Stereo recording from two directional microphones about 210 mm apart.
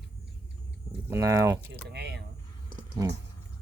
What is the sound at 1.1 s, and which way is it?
Speech, 15° right (ahead or behind).